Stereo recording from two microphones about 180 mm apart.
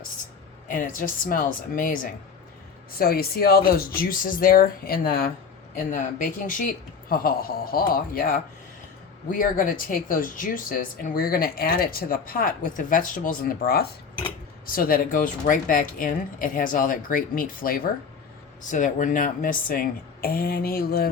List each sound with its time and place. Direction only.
0.7 s speech: 50° left (ahead or behind)